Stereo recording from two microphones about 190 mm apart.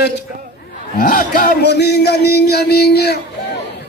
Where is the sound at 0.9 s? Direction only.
45° left (ahead or behind).